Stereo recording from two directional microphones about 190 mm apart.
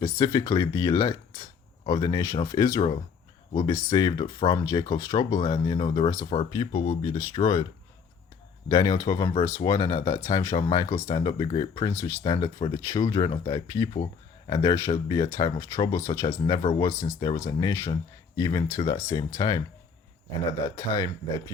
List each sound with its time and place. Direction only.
0.0 s speech: 15° left (ahead or behind)
8.7 s speech: 20° left (ahead or behind)
16.6 s speech: 30° left (ahead or behind)
17.0 s speech: 20° left (ahead or behind)
20.7 s speech: 15° left (ahead or behind)